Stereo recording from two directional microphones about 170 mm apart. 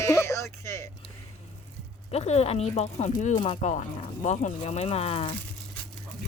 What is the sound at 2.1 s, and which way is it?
Speech, 40° left (ahead or behind).